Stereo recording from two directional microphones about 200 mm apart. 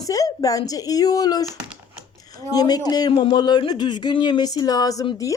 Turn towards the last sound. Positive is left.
turn(degrees=15)  # may be behind; listen again after turning